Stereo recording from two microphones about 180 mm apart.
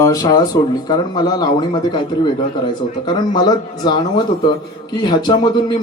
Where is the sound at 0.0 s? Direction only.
20° left (ahead or behind).